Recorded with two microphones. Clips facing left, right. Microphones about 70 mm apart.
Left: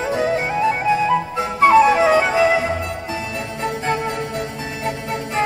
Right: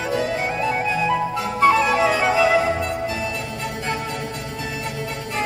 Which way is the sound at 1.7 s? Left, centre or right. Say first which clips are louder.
Left 7 dB; left.